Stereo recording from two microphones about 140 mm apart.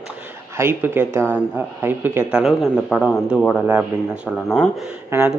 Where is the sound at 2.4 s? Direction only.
Centre (ahead or behind).